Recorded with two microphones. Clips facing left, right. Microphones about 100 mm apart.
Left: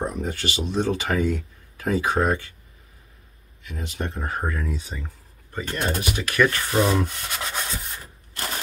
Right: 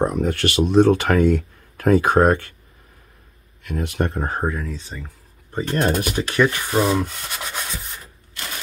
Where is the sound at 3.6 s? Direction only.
60° right (ahead or behind).